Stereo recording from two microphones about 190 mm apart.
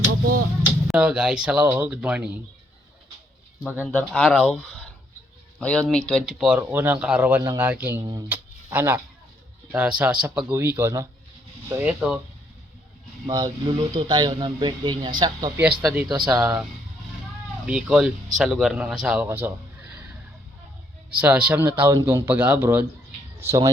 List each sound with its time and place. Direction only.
0.9 s speech: 5° right (ahead or behind)
3.8 s speech: 5° left (ahead or behind)
8.0 s speech: 20° right (ahead or behind)
8.3 s a sound: 10° right (ahead or behind)
9.7 s speech: 10° right (ahead or behind)
13.2 s speech: 25° right (ahead or behind)
15.5 s speech: 5° right (ahead or behind)
17.7 s speech: 5° right (ahead or behind)
21.2 s speech: 10° right (ahead or behind)